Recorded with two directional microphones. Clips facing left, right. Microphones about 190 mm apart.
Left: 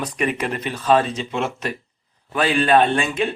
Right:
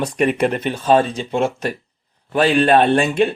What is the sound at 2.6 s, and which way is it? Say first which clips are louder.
Speech: right 3 dB; 50° right (ahead or behind).